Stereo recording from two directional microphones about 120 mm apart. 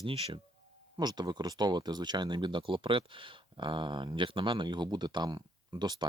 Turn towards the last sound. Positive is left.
turn(degrees=-35)  # may be behind; listen again after turning